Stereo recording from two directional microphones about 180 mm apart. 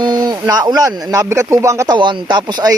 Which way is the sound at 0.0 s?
25° right (ahead or behind).